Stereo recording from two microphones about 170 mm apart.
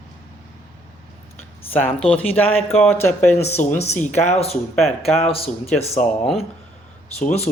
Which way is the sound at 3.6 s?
50° left (ahead or behind).